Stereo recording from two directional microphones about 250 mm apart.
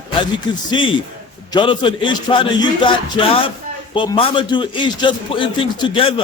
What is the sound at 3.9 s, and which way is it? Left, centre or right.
A man's voice, centre.